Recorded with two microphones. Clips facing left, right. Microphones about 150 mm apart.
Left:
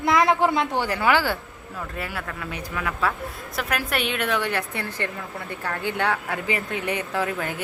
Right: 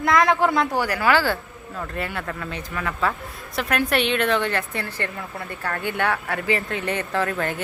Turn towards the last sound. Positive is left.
turn(degrees=10)  # may be behind; listen again after turning